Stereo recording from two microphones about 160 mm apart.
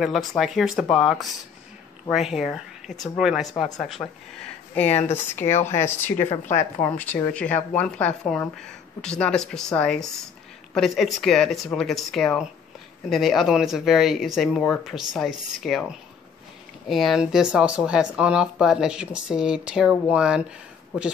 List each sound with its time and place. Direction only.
0.0 s speech: centre (ahead or behind)
4.0 s speech: 20° left (ahead or behind)
4.4 s a sound: 10° left (ahead or behind)
5.4 s speech: 45° left (ahead or behind)
5.9 s speech: 15° left (ahead or behind); by 20.4 s 5° right (ahead or behind)